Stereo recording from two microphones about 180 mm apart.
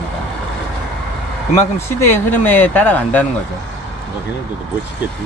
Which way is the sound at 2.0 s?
10° left (ahead or behind).